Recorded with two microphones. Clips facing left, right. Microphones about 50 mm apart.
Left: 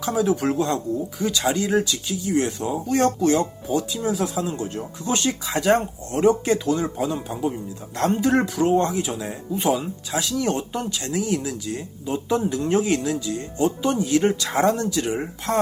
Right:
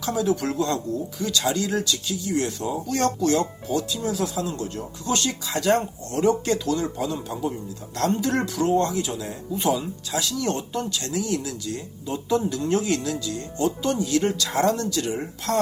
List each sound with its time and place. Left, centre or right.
0.0 s speech: left